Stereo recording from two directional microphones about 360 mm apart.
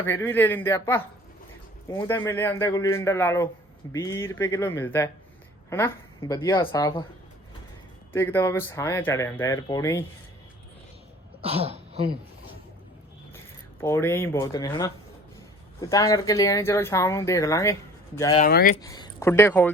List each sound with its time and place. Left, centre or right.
0.0 s speech: centre
8.1 s speech: centre
11.4 s speech: centre
13.8 s speech: centre; by 18.8 s left
18.8 s speech: centre